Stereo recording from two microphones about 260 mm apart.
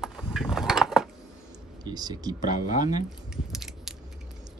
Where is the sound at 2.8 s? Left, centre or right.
Left.